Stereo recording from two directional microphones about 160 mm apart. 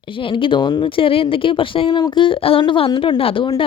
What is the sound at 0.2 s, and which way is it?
A woman's voice, 30° left (ahead or behind).